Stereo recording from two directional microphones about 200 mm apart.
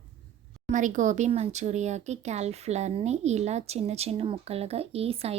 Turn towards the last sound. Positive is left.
turn(degrees=-30)  # may be behind; listen again after turning